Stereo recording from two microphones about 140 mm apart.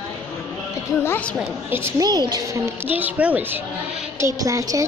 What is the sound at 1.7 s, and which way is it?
A woman's voice, 20° right (ahead or behind).